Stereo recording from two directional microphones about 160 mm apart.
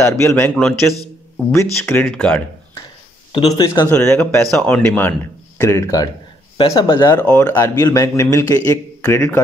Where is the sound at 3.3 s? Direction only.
25° left (ahead or behind).